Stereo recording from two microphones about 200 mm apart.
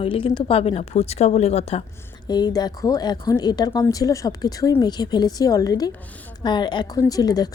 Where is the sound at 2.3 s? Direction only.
20° left (ahead or behind).